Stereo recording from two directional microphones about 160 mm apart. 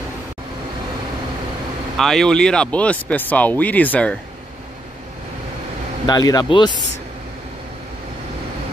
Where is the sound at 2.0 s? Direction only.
Centre (ahead or behind).